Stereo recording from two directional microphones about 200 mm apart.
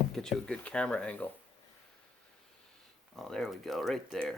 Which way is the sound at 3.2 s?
Centre (ahead or behind).